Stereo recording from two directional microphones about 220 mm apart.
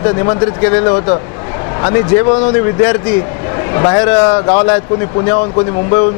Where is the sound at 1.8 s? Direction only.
20° left (ahead or behind).